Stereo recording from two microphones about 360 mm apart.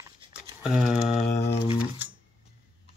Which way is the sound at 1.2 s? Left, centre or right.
Left.